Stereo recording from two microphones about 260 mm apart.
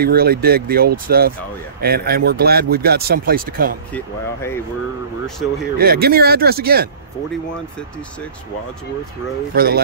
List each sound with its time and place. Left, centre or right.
0.0 s speech: right
3.9 s speech: centre
5.8 s speech: right
9.5 s speech: right